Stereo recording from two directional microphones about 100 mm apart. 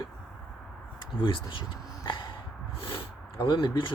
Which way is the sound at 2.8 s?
60° left (ahead or behind).